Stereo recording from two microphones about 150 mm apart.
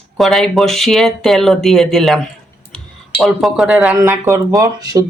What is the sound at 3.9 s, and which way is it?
Speech, 20° right (ahead or behind).